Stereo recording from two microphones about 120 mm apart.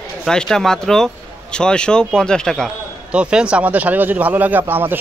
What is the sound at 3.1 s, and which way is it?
Speech, 10° right (ahead or behind).